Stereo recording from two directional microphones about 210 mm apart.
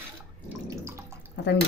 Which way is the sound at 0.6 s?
15° right (ahead or behind).